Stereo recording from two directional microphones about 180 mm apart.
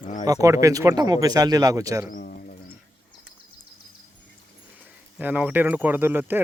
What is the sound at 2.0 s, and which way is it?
Bird, 50° left (ahead or behind).